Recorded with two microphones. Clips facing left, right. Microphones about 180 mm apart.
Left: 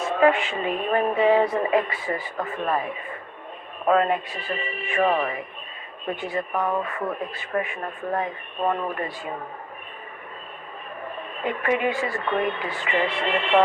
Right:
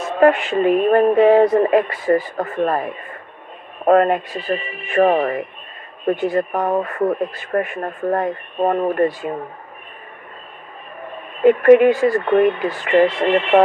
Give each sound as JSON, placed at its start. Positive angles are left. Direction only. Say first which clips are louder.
{"t": 0.2, "sound": "speech", "louder": "right 7 dB", "side_deg": -45}
{"t": 3.8, "sound": "speech", "louder": "right 7 dB", "side_deg": -50}
{"t": 11.6, "sound": "speech", "louder": "right 14 dB", "side_deg": -55}
{"t": 11.9, "sound": "speech", "louder": "right 10 dB", "side_deg": -40}